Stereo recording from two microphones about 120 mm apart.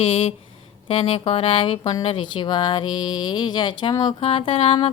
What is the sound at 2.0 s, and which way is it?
Speech, 50° left (ahead or behind).